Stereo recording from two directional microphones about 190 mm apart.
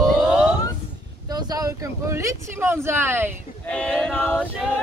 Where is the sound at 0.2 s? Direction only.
5° right (ahead or behind).